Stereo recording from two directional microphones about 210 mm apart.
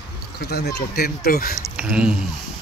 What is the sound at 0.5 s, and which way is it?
Speech, 50° left (ahead or behind).